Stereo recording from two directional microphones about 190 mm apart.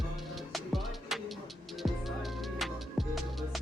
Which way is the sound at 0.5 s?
Centre (ahead or behind).